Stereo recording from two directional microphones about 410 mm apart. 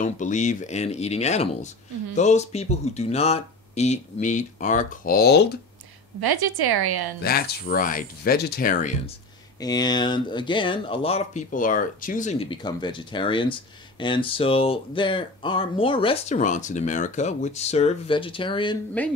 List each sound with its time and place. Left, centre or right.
0.0 s speech: centre
6.2 s a woman's voice: right
7.2 s speech: left